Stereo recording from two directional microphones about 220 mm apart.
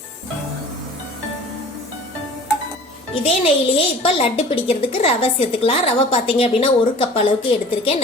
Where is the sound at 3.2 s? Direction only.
25° left (ahead or behind).